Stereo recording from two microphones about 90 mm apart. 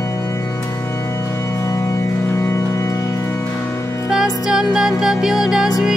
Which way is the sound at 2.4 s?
30° left (ahead or behind).